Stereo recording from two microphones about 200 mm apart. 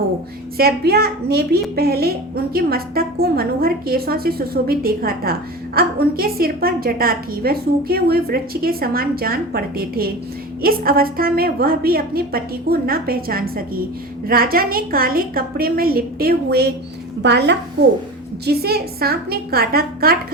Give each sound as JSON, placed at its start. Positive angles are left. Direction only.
{"t": 0.5, "sound": "a woman's voice", "side_deg": -50}